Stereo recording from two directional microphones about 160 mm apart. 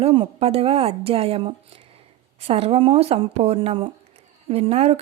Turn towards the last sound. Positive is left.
turn(degrees=-40)  # may be behind; listen again after turning